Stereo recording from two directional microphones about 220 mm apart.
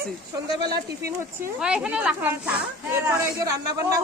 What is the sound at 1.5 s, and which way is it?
A woman's voice, 5° right (ahead or behind).